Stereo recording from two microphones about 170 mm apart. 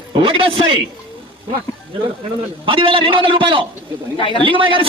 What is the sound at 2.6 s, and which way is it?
Speech, 30° right (ahead or behind).